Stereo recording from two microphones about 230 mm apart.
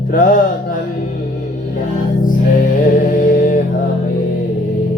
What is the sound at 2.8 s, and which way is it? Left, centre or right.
Mantra, left.